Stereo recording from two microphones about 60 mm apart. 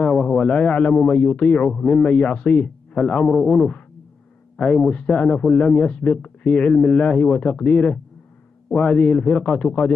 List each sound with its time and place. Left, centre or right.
0.0 s a man's voice: centre
2.0 s a man's voice: centre
3.3 s a man's voice: centre; by 9.9 s left